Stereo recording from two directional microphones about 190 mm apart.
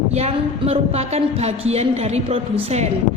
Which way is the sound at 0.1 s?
35° right (ahead or behind).